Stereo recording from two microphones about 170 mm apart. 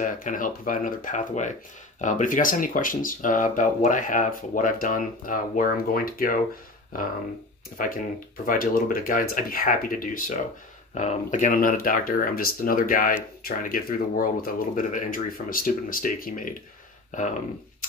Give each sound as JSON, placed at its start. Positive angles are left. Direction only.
{"t": 0.0, "sound": "speech", "side_deg": 50}